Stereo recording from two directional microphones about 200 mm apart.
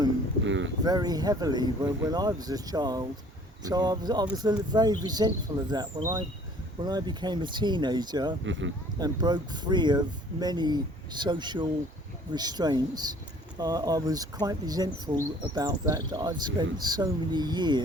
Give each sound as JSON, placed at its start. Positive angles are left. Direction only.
{"t": 0.4, "sound": "a sound", "side_deg": -70}
{"t": 0.9, "sound": "speech", "side_deg": -20}
{"t": 8.4, "sound": "speech", "side_deg": -70}
{"t": 9.0, "sound": "speech", "side_deg": -20}